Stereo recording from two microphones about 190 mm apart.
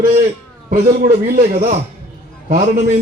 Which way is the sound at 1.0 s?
50° right (ahead or behind).